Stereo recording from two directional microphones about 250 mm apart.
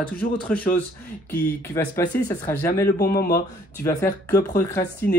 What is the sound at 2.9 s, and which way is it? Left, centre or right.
Speech, left.